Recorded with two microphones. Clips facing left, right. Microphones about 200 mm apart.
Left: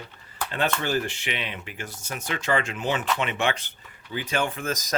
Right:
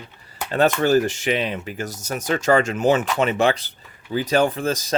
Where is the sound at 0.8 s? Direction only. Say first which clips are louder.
Right 9 dB; 40° right (ahead or behind).